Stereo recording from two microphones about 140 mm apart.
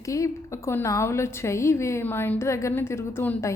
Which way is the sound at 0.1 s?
20° left (ahead or behind).